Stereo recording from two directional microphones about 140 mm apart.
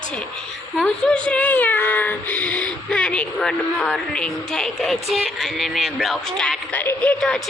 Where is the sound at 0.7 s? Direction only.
5° left (ahead or behind).